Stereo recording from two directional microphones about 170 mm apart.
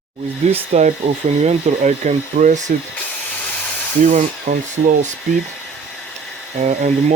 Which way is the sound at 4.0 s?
45° right (ahead or behind).